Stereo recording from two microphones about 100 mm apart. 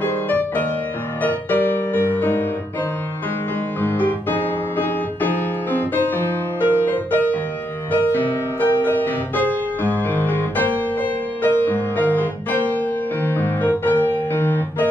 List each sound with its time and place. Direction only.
0.0 s music: 15° left (ahead or behind)
3.8 s piano: 20° left (ahead or behind)
6.9 s music: 15° left (ahead or behind)
13.2 s piano: 20° left (ahead or behind)